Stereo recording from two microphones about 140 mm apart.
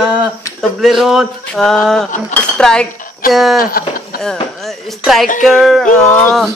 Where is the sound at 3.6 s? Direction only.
90° left.